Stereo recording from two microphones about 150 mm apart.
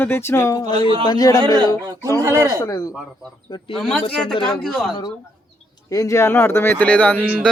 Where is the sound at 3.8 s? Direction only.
5° left (ahead or behind).